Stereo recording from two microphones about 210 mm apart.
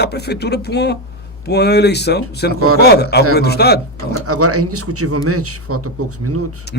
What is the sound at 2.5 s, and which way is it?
Speech, 90° right.